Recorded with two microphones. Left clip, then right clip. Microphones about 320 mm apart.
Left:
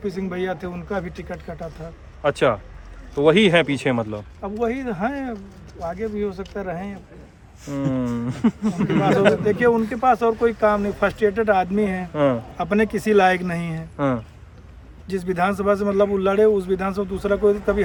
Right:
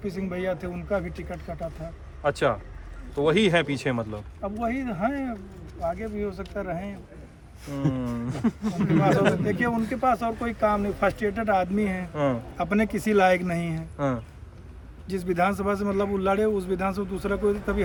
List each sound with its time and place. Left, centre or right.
0.0 s a man's voice: centre
2.2 s speech: left
4.4 s a man's voice: centre
7.7 s speech: left
8.9 s a man's voice: centre
12.1 s speech: left
12.5 s a man's voice: centre
13.9 s speech: left
15.0 s a man's voice: centre